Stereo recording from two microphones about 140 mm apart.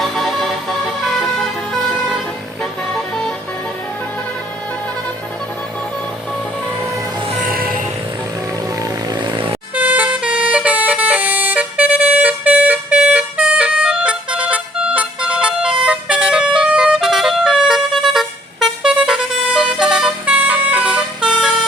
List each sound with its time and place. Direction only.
0.0 s vehicle: centre (ahead or behind)
6.7 s music: 15° right (ahead or behind)
7.4 s vehicle: 90° right
8.8 s vehicle: 30° right (ahead or behind)
9.7 s vehicle: 10° right (ahead or behind)